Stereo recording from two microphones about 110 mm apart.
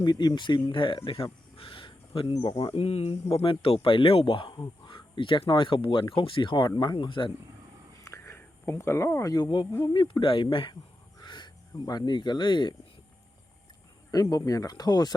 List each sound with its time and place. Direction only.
0.0 s speech: 40° left (ahead or behind)
8.0 s a sound: 25° left (ahead or behind)
9.8 s speech: 45° left (ahead or behind)
14.1 s speech: 35° left (ahead or behind)